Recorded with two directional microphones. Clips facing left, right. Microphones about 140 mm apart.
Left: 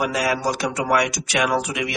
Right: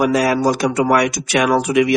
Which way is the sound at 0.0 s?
45° right (ahead or behind).